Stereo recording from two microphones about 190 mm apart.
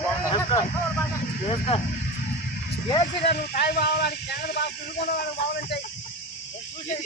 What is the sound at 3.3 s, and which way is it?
A man's voice, 55° left (ahead or behind).